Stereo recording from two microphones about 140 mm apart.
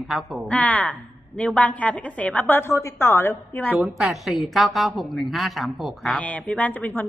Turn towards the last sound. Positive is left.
turn(degrees=10)  # may be behind; listen again after turning